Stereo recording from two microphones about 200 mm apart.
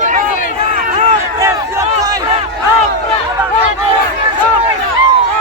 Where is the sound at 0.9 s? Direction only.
35° right (ahead or behind).